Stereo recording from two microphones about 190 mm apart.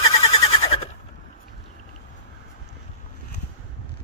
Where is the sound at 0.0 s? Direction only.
35° left (ahead or behind).